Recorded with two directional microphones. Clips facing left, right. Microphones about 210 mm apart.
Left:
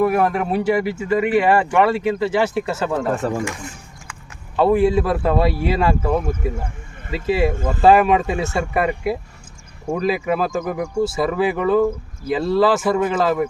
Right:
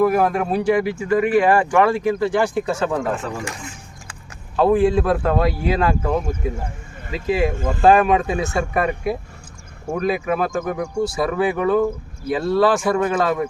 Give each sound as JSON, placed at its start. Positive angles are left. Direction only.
{"t": 0.0, "sound": "speech", "side_deg": 0}
{"t": 3.2, "sound": "speech", "side_deg": 45}
{"t": 4.5, "sound": "speech", "side_deg": 0}